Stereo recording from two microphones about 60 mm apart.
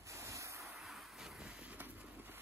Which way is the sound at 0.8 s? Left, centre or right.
Centre.